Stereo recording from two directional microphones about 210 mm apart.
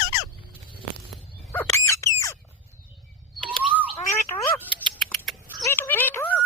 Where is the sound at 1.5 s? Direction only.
10° left (ahead or behind).